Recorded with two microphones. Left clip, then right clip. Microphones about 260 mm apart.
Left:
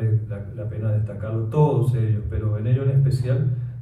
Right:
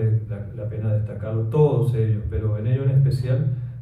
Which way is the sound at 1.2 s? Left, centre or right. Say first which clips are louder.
Right 2 dB; right.